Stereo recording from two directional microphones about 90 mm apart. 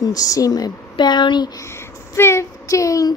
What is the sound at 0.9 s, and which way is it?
Speech, 55° left (ahead or behind).